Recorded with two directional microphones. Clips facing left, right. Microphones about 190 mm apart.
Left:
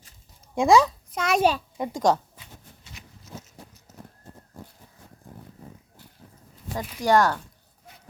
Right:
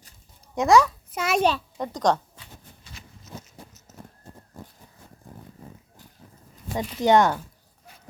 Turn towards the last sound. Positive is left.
turn(degrees=-20)  # may be behind; listen again after turning